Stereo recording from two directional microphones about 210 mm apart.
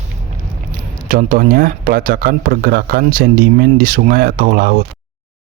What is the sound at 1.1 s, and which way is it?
Speech, 40° right (ahead or behind).